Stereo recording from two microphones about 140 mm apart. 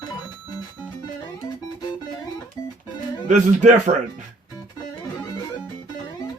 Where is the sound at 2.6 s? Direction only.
25° left (ahead or behind).